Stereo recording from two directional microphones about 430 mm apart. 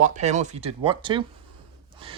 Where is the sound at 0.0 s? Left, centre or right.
Centre.